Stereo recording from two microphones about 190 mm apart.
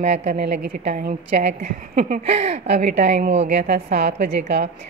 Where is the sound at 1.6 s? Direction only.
40° right (ahead or behind).